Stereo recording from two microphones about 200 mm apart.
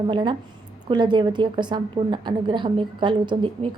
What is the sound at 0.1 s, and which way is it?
Speech, 25° right (ahead or behind).